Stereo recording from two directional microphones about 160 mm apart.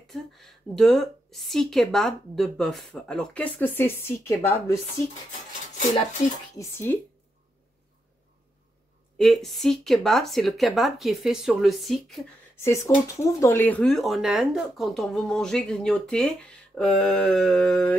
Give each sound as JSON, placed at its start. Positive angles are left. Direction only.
{"t": 0.0, "sound": "speech", "side_deg": 0}
{"t": 6.6, "sound": "speech", "side_deg": 15}
{"t": 9.2, "sound": "speech", "side_deg": 0}
{"t": 12.5, "sound": "speech", "side_deg": 15}